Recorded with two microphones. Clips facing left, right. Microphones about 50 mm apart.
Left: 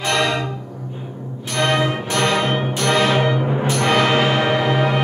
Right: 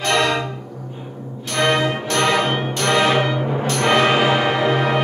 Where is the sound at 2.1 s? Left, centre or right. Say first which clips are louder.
Even; centre.